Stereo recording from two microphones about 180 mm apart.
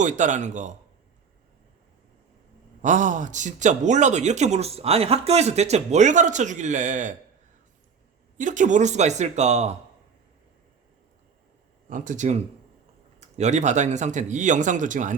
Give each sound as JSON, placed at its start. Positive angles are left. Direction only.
{"t": 0.0, "sound": "speech", "side_deg": -45}
{"t": 2.8, "sound": "speech", "side_deg": -45}
{"t": 8.4, "sound": "speech", "side_deg": -45}
{"t": 11.9, "sound": "speech", "side_deg": -45}